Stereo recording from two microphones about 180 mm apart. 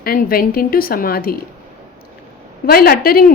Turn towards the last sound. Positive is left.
turn(degrees=55)  # may be behind; listen again after turning